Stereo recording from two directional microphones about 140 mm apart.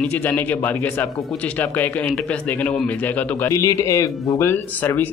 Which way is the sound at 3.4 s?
20° left (ahead or behind).